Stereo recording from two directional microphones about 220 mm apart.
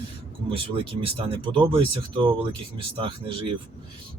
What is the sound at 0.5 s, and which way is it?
Speech, 25° right (ahead or behind).